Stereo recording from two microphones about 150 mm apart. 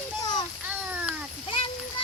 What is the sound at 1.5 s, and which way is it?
Splash, 35° left (ahead or behind).